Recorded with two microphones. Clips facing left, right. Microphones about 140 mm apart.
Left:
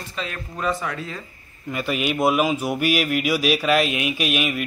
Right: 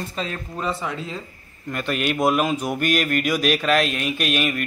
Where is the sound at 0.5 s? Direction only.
20° right (ahead or behind).